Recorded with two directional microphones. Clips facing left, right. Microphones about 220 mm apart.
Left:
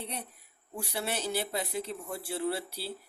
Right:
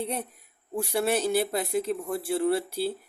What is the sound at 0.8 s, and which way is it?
Speech, 55° right (ahead or behind).